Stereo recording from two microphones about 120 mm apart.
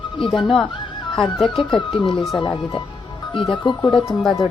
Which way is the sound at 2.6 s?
35° left (ahead or behind).